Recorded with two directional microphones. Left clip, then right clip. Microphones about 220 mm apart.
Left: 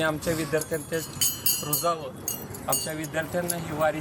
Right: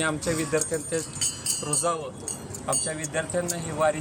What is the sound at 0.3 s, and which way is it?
Speech, 5° right (ahead or behind).